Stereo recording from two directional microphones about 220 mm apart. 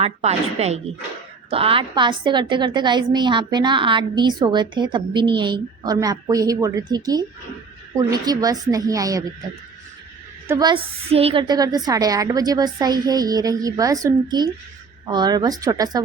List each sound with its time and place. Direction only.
0.0 s a woman's voice: 30° right (ahead or behind)
10.5 s a woman's voice: 20° right (ahead or behind)